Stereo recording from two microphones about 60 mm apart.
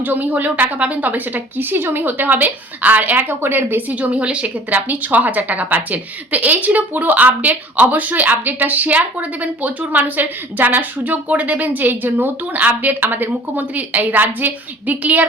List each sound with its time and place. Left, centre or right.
0.0 s a woman's voice: right